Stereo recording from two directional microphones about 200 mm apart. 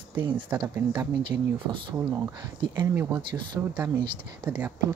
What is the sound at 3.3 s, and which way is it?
Speech, 10° right (ahead or behind).